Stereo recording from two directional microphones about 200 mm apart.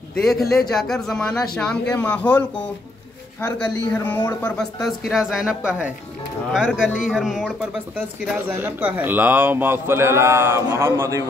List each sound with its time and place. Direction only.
0.1 s a man's voice: centre (ahead or behind)
3.5 s a man's voice: 5° left (ahead or behind); by 11.2 s 15° right (ahead or behind)